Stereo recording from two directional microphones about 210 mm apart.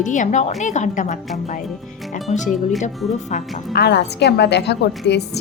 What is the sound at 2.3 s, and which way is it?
Speech, 30° left (ahead or behind).